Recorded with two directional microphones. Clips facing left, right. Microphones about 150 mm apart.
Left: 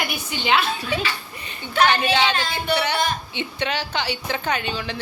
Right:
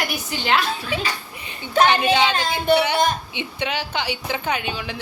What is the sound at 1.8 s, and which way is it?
A woman's voice, 15° right (ahead or behind).